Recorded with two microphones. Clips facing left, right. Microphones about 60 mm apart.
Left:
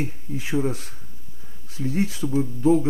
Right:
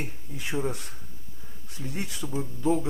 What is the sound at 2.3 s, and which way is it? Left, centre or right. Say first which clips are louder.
Speech: left 7 dB; centre.